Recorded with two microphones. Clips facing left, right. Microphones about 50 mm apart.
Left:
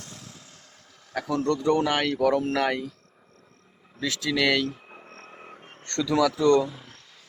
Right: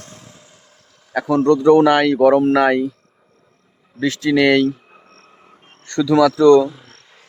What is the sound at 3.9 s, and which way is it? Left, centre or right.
Speech, right.